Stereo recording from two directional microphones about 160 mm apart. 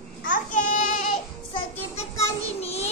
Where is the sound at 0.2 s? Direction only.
55° left (ahead or behind).